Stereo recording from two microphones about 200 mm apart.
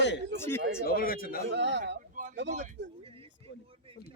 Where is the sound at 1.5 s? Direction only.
60° right (ahead or behind).